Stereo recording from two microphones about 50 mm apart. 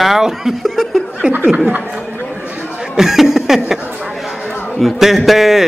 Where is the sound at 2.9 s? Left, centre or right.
Centre.